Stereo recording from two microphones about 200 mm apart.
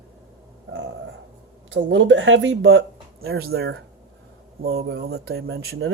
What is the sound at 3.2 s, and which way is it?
Speech, 50° right (ahead or behind).